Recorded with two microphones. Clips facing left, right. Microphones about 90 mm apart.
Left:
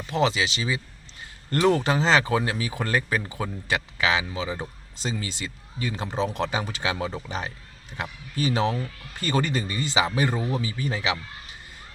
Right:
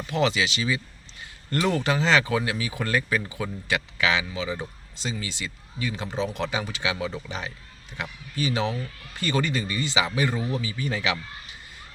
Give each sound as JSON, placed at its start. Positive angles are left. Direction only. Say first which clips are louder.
{"t": 0.1, "sound": "speech", "louder": "left 1 dB", "side_deg": 35}